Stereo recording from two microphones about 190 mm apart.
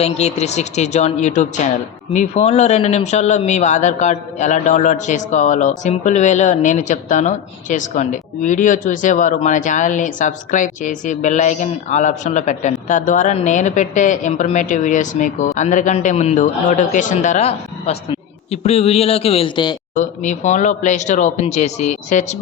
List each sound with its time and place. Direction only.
0.0 s a man's voice: 35° left (ahead or behind)
20.0 s a man's voice: 40° left (ahead or behind)